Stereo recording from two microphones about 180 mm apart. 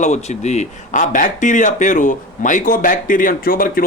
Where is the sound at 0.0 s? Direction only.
40° left (ahead or behind).